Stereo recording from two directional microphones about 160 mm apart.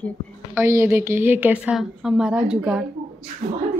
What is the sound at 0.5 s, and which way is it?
A woman's voice, 15° right (ahead or behind).